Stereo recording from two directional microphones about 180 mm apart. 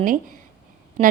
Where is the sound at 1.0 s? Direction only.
30° right (ahead or behind).